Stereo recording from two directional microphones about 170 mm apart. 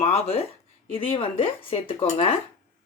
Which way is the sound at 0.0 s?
35° left (ahead or behind).